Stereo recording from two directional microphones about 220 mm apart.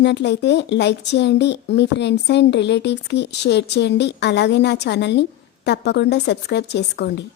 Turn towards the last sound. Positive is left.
turn(degrees=50)  # may be behind; listen again after turning